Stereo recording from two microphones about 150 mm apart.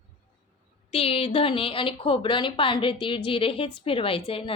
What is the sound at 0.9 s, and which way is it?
A woman's voice, 40° left (ahead or behind).